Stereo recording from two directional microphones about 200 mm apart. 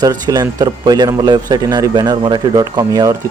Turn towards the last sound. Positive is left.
turn(degrees=-20)  # may be behind; listen again after turning